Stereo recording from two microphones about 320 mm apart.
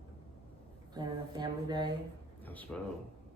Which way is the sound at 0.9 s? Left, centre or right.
Centre.